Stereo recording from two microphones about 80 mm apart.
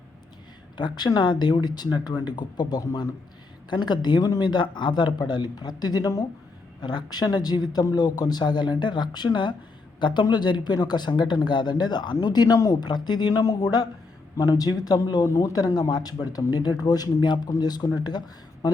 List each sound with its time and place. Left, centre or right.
0.8 s speech: left
6.8 s speech: left
12.9 s speech: left
13.4 s speech: left
15.3 s speech: left
17.5 s speech: left